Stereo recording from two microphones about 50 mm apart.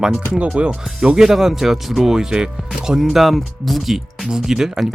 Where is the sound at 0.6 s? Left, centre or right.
Right.